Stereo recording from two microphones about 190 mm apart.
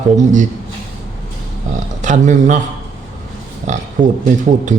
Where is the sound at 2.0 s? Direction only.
40° right (ahead or behind).